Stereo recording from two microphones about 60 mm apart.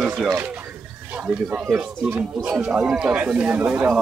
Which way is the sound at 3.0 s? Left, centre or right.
Centre.